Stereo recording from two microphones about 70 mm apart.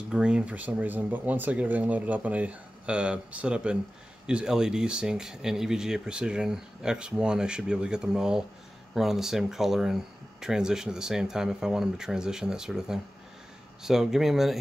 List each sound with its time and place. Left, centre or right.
0.1 s speech: centre